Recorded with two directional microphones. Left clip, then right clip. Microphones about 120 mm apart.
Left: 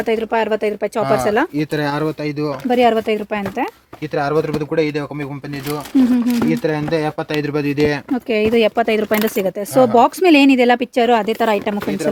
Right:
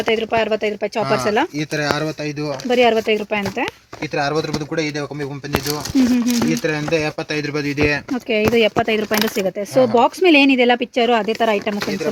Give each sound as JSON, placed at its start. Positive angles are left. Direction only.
{"t": 0.1, "sound": "speech", "side_deg": 20}
{"t": 1.5, "sound": "speech", "side_deg": 90}
{"t": 2.6, "sound": "speech", "side_deg": 15}
{"t": 4.1, "sound": "speech", "side_deg": 50}
{"t": 4.7, "sound": "speech", "side_deg": 75}
{"t": 6.0, "sound": "speech", "side_deg": 5}
{"t": 6.5, "sound": "speech", "side_deg": 40}
{"t": 8.3, "sound": "speech", "side_deg": 30}
{"t": 10.3, "sound": "speech", "side_deg": 15}
{"t": 11.3, "sound": "speech", "side_deg": 35}